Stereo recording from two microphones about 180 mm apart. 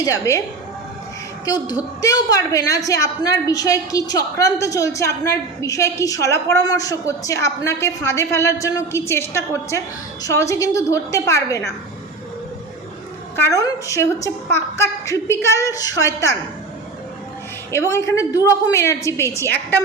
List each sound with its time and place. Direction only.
0.0 s a woman's voice: 20° left (ahead or behind)
2.0 s a woman's voice: 20° left (ahead or behind)
13.3 s a woman's voice: 15° left (ahead or behind)
17.7 s a woman's voice: 15° left (ahead or behind)